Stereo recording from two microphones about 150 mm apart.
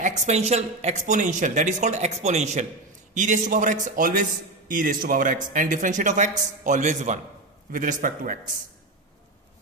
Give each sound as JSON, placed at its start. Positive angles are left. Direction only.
{"t": 0.0, "sound": "a man's voice", "side_deg": -50}